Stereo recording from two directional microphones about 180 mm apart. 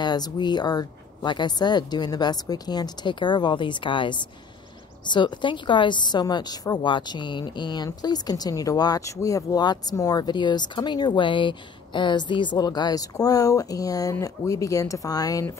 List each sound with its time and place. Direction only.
0.0 s a woman's voice: 25° left (ahead or behind)